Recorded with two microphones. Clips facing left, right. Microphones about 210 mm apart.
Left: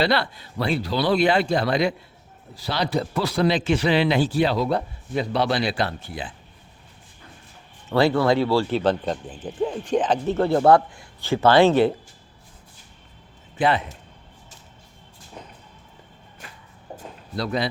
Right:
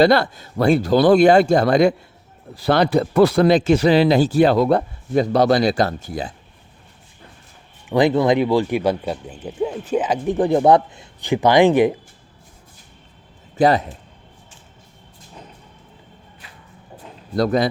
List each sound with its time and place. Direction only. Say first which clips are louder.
0.0 s speech: right 8 dB; 45° right (ahead or behind)
7.9 s speech: right 3 dB; 15° right (ahead or behind)
13.6 s speech: right 6 dB; 40° right (ahead or behind)
16.4 s shuffle: left 4 dB; 45° left (ahead or behind)
17.3 s speech: right 8 dB; 45° right (ahead or behind)